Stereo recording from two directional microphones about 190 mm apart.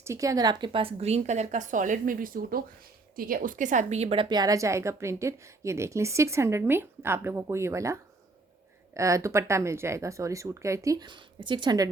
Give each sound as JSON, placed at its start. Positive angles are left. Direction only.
{"t": 0.0, "sound": "a woman's voice", "side_deg": -15}
{"t": 9.0, "sound": "a woman's voice", "side_deg": -15}